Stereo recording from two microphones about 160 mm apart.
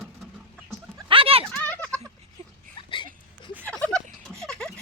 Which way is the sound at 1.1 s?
35° right (ahead or behind).